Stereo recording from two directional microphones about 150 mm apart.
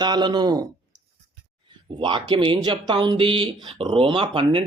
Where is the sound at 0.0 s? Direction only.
30° right (ahead or behind).